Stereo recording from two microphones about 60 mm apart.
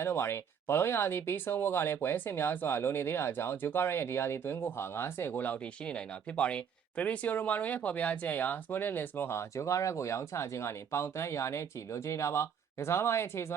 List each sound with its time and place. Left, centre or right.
0.0 s speech: left
5.8 s speech: centre; by 13.5 s left